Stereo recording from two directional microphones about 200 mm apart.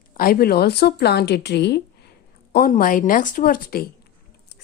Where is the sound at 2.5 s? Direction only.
45° left (ahead or behind).